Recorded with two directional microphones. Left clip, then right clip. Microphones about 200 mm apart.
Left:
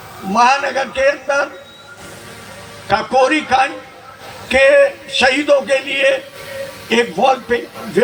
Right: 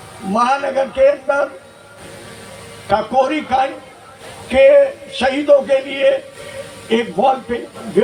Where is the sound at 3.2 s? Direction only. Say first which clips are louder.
Left 3 dB; 55° right (ahead or behind).